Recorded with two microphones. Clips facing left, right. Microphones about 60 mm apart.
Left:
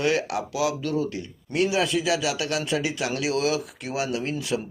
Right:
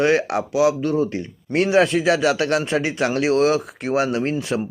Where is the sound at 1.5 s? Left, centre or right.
Right.